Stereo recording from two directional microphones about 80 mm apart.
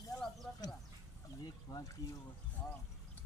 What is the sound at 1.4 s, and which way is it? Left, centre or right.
Speech, left.